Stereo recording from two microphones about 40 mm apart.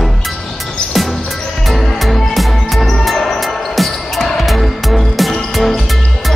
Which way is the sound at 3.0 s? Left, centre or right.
Centre.